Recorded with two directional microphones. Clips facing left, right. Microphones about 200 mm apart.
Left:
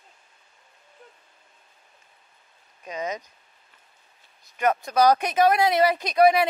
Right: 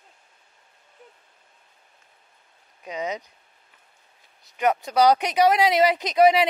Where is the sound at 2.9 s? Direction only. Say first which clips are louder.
Right 1 dB; 15° right (ahead or behind).